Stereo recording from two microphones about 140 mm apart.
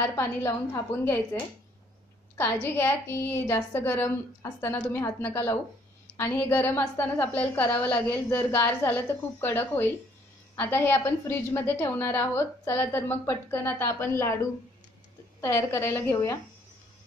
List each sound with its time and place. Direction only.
0.0 s a woman's voice: 15° left (ahead or behind)
2.3 s a woman's voice: 15° left (ahead or behind)